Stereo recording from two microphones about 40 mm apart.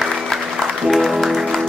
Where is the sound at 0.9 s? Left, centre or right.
Centre.